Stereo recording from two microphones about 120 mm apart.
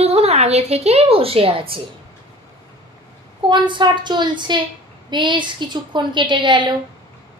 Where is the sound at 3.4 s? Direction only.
40° right (ahead or behind).